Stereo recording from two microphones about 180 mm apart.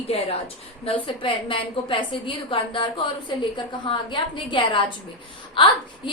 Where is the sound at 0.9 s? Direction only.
30° left (ahead or behind).